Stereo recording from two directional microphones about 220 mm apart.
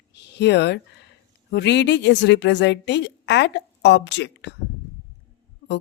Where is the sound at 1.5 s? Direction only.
50° left (ahead or behind).